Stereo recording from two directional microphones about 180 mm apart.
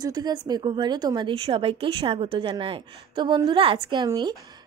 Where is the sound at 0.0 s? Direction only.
20° right (ahead or behind).